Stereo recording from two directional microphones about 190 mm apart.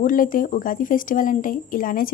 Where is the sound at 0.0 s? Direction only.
45° left (ahead or behind).